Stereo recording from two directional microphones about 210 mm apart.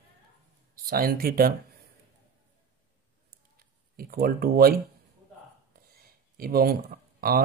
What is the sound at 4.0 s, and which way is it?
Speech, 45° right (ahead or behind).